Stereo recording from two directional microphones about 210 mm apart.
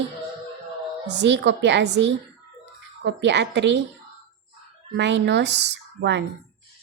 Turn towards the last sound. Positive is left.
turn(degrees=-55)  # may be behind; listen again after turning